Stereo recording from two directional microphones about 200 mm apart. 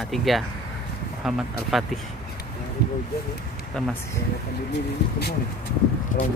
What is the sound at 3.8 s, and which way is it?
Speech, 5° left (ahead or behind).